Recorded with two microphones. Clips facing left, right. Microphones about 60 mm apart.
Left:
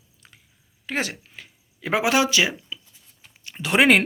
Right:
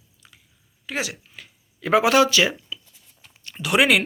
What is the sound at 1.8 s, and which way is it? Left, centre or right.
Speech, left.